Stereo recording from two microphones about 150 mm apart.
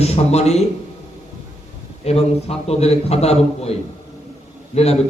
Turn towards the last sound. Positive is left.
turn(degrees=45)  # may be behind; listen again after turning